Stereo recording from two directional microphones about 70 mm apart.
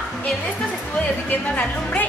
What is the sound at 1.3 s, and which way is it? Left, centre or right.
Speech, left.